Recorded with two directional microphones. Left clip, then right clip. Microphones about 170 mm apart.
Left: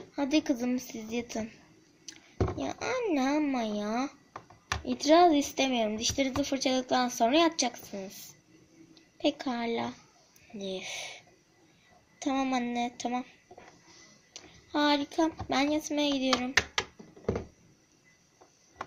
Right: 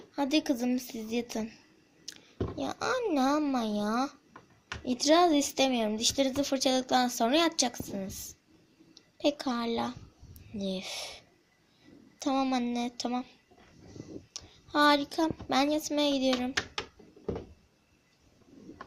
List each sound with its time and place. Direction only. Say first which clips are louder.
0.2 s a child's voice: even; 20° right (ahead or behind)
12.2 s speech: right 1 dB; 20° right (ahead or behind)
14.3 s speech: right 3 dB; 25° right (ahead or behind)